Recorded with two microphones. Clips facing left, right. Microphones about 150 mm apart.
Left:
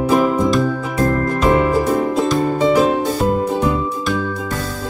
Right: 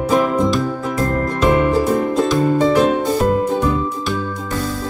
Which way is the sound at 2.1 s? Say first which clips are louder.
Right 1 dB; 5° left (ahead or behind).